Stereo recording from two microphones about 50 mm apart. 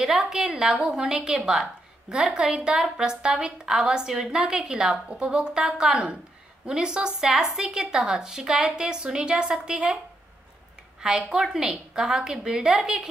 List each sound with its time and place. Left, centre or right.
0.0 s a woman's voice: centre
11.0 s a woman's voice: centre